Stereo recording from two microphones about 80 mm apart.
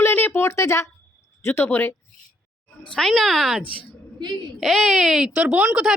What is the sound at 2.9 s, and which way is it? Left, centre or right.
Speech, centre.